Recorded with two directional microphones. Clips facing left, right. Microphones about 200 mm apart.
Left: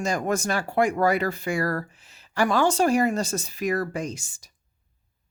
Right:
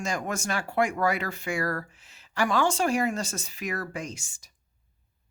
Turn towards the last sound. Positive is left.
turn(degrees=35)  # may be behind; listen again after turning